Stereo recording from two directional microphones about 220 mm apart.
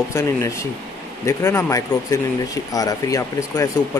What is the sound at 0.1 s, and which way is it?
Speech, 15° left (ahead or behind).